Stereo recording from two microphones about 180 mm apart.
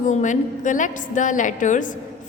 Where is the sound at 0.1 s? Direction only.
45° left (ahead or behind).